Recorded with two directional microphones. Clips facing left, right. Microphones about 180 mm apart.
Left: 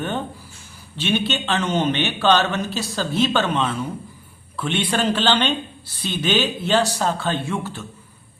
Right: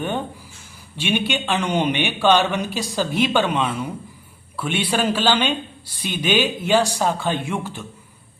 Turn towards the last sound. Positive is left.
turn(degrees=-15)  # may be behind; listen again after turning